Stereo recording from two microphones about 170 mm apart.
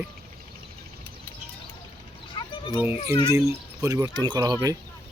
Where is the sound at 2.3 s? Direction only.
30° left (ahead or behind).